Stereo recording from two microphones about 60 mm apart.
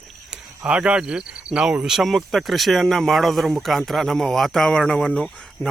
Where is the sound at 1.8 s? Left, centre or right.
Centre.